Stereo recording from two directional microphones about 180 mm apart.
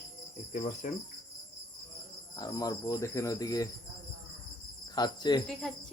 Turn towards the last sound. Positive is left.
turn(degrees=0)  # may be behind; listen again after turning